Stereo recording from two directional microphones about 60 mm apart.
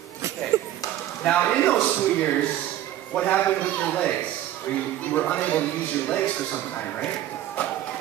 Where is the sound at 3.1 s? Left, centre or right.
Left.